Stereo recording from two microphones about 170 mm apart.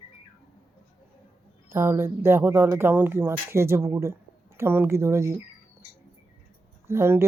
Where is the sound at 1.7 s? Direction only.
15° right (ahead or behind).